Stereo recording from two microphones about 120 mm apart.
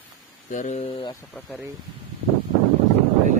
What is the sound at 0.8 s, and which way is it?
Speech, 50° left (ahead or behind).